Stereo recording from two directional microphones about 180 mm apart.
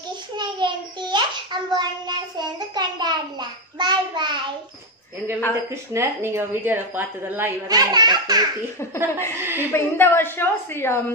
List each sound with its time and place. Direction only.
0.4 s a child's voice: 25° right (ahead or behind)
5.9 s a woman's voice: 15° right (ahead or behind)
9.4 s a woman's voice: 10° right (ahead or behind)
9.7 s a woman's voice: 15° left (ahead or behind)